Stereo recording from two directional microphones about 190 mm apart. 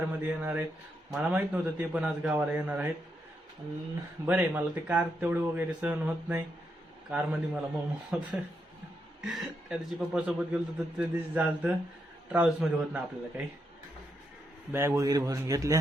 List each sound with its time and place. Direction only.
0.0 s speech: 10° right (ahead or behind)
4.3 s a man's voice: 10° right (ahead or behind)
14.7 s speech: 15° right (ahead or behind)